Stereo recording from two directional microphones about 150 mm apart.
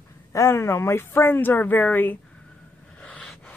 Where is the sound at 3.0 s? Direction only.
5° left (ahead or behind).